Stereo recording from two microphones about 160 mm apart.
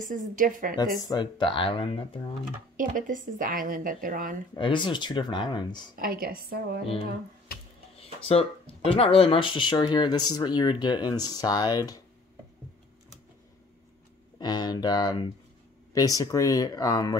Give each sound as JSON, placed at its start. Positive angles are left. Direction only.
{"t": 0.0, "sound": "a woman's voice", "side_deg": -55}
{"t": 1.0, "sound": "speech", "side_deg": 30}
{"t": 2.8, "sound": "a woman's voice", "side_deg": -55}
{"t": 4.6, "sound": "speech", "side_deg": 30}
{"t": 5.9, "sound": "a woman's voice", "side_deg": -65}
{"t": 8.0, "sound": "speech", "side_deg": 35}
{"t": 14.4, "sound": "speech", "side_deg": 25}